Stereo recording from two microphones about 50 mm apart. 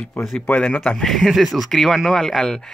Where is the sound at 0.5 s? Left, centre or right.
Left.